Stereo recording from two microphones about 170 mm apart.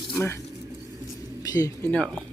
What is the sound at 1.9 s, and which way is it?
Speech, 5° left (ahead or behind).